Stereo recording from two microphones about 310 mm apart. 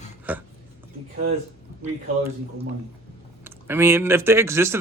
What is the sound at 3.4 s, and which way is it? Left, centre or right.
Speech, centre.